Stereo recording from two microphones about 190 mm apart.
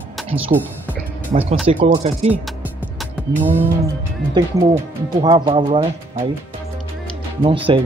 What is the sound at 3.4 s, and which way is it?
Music, 10° right (ahead or behind).